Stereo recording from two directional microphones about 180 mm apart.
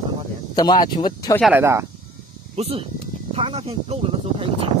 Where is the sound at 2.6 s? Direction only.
35° right (ahead or behind).